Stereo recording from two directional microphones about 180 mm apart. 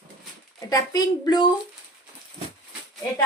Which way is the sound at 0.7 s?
20° left (ahead or behind).